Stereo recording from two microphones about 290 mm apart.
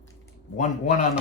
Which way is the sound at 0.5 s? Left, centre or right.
Left.